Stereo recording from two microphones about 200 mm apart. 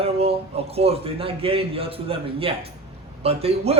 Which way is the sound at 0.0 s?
30° right (ahead or behind).